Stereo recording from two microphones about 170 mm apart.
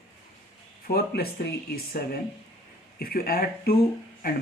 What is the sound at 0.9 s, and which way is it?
Speech, 65° left (ahead or behind).